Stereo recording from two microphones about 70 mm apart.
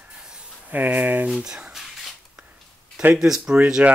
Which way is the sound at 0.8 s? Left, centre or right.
Right.